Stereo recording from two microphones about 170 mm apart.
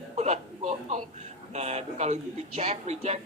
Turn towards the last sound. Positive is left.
turn(degrees=-40)  # may be behind; listen again after turning